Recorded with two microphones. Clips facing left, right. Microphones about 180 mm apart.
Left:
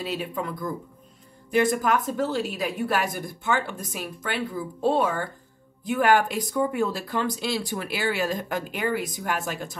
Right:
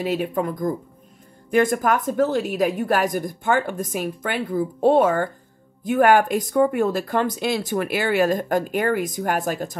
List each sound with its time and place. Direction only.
0.0 s a woman's voice: 50° right (ahead or behind)